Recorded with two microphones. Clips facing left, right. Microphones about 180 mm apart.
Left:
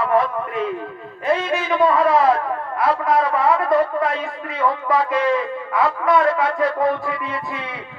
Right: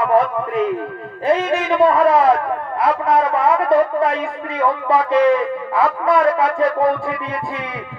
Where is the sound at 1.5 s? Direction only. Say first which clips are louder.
Right 2 dB; 30° right (ahead or behind).